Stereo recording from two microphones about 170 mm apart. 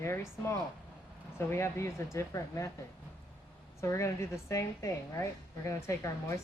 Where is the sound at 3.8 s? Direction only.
15° left (ahead or behind).